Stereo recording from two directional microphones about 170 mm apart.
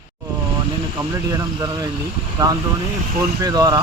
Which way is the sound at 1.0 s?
20° right (ahead or behind).